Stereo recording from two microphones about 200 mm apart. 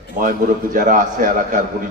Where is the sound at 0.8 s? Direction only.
45° right (ahead or behind).